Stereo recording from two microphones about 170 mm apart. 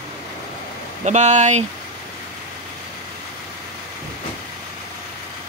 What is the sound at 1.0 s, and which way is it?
Speech, 45° right (ahead or behind).